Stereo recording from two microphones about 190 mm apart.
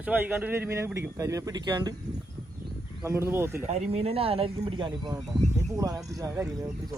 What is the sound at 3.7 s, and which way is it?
Speech, 35° right (ahead or behind).